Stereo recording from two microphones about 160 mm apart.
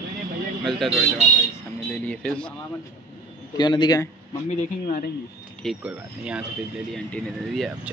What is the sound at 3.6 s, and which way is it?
Speech, 30° left (ahead or behind).